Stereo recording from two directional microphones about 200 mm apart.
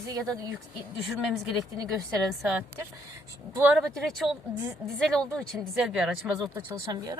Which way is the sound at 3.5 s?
10° right (ahead or behind).